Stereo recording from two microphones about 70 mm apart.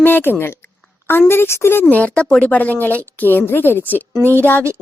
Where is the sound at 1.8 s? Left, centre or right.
Centre.